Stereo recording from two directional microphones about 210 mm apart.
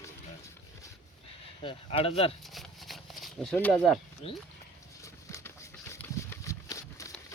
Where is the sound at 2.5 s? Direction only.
Centre (ahead or behind).